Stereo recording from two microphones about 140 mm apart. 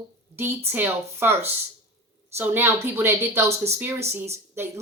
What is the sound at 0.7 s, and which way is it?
Speech, 15° right (ahead or behind).